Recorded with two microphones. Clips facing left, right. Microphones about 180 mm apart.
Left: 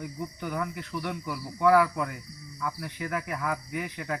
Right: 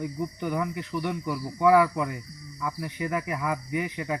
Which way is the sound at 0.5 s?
10° right (ahead or behind).